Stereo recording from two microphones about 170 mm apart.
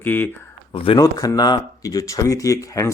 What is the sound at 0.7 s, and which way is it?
Speech, 30° left (ahead or behind).